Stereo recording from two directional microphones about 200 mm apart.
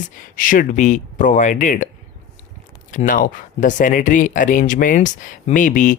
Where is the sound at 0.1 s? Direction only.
40° left (ahead or behind).